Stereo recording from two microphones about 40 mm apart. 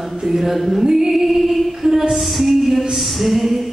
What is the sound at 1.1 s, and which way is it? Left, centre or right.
Music, centre.